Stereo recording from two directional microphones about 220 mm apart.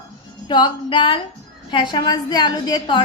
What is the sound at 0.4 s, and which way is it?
A woman's voice, 20° left (ahead or behind).